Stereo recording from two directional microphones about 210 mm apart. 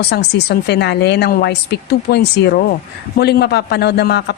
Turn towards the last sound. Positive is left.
turn(degrees=50)  # may be behind; listen again after turning